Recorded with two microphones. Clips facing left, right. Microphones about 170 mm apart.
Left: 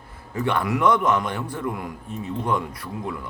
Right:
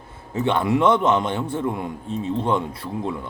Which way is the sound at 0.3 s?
25° right (ahead or behind).